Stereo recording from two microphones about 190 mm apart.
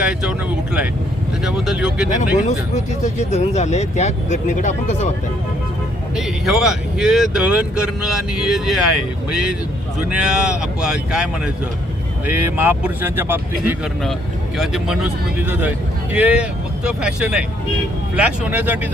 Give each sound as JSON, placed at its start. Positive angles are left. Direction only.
{"t": 0.0, "sound": "speech", "side_deg": -5}
{"t": 2.0, "sound": "speech", "side_deg": 40}
{"t": 6.1, "sound": "speech", "side_deg": 0}
{"t": 10.1, "sound": "speech", "side_deg": -5}
{"t": 16.1, "sound": "speech", "side_deg": -5}